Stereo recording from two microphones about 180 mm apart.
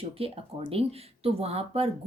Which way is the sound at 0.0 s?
30° right (ahead or behind).